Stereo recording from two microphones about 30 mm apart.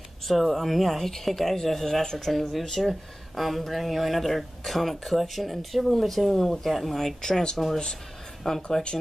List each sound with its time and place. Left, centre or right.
0.3 s speech: centre
7.2 s speech: left
7.5 s speech: centre